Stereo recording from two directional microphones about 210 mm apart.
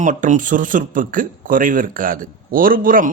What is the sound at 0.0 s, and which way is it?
Speech, 35° right (ahead or behind).